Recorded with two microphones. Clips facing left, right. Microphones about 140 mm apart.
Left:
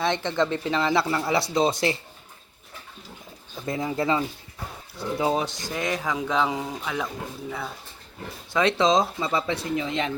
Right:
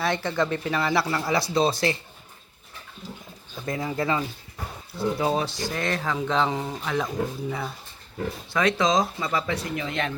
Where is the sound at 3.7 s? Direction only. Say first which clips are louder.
Left 1 dB; 25° left (ahead or behind); by 7.0 s 5° left (ahead or behind).